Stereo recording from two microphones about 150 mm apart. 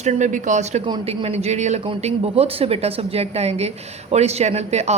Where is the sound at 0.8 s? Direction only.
35° right (ahead or behind).